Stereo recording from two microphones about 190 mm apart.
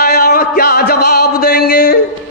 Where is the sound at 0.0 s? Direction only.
55° left (ahead or behind).